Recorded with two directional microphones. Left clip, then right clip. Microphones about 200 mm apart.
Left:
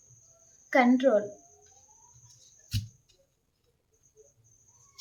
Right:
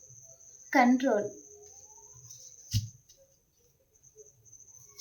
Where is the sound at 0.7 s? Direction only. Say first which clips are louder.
Left 2 dB; 20° left (ahead or behind).